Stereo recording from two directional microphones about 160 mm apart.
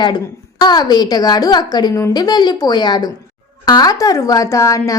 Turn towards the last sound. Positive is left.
turn(degrees=20)  # may be behind; listen again after turning